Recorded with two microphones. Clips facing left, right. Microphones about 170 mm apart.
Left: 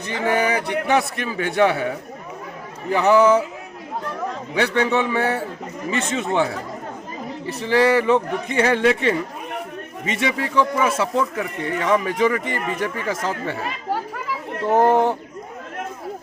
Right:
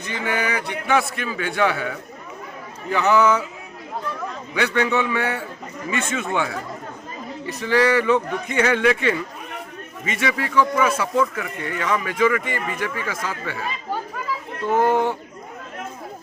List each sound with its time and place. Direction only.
0.1 s speech: 35° left (ahead or behind)
4.5 s speech: 30° left (ahead or behind)
11.3 s speech: 35° left (ahead or behind)
14.7 s speech: 35° left (ahead or behind)